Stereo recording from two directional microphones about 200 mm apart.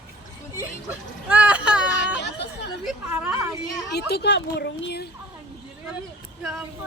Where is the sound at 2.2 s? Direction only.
55° left (ahead or behind).